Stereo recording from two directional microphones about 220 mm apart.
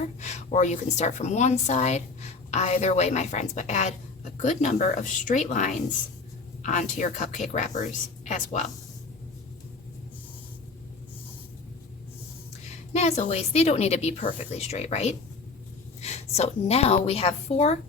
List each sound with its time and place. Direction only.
0.2 s a woman's voice: 30° left (ahead or behind)
12.9 s a woman's voice: 30° left (ahead or behind)